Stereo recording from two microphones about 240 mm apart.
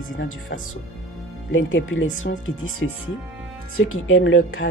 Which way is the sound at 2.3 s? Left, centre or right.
Left.